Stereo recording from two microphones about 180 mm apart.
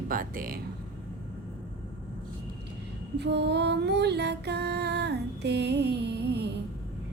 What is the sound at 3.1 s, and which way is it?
Music, 70° right (ahead or behind).